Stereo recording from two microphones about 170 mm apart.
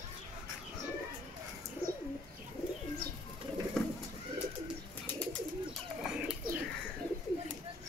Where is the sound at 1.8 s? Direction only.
60° right (ahead or behind).